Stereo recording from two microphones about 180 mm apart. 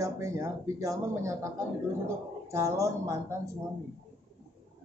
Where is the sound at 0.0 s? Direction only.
15° right (ahead or behind).